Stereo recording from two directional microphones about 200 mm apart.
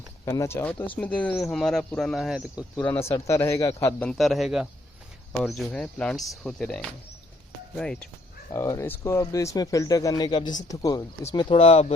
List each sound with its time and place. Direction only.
0.3 s speech: 15° left (ahead or behind)
4.1 s speech: centre (ahead or behind)
8.5 s speech: 15° left (ahead or behind); by 11.9 s 30° left (ahead or behind)